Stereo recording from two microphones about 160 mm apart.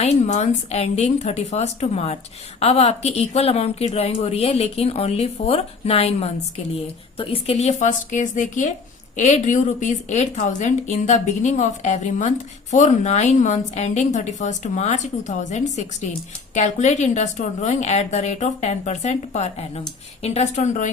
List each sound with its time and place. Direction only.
0.0 s a woman's voice: 45° left (ahead or behind)